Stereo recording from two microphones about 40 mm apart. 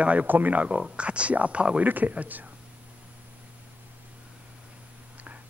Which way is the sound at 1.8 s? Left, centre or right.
Right.